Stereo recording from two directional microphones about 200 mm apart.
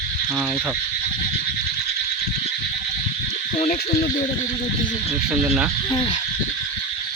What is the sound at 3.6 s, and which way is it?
Speech, 45° left (ahead or behind).